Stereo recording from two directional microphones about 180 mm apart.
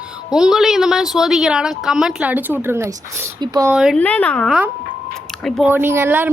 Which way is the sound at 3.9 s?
10° left (ahead or behind).